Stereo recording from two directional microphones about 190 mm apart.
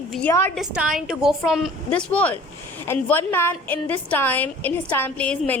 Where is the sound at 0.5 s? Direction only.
5° right (ahead or behind).